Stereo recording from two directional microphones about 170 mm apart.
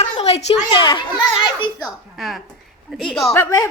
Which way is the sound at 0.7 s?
30° left (ahead or behind).